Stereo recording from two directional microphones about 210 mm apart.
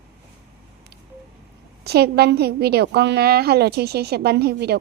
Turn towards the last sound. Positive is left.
turn(degrees=-50)  # may be behind; listen again after turning